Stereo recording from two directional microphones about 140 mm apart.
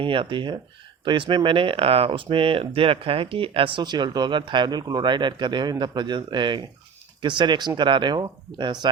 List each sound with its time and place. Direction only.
0.0 s speech: 40° right (ahead or behind)